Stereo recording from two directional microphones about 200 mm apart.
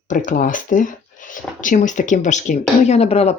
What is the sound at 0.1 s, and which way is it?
Speech, 40° left (ahead or behind).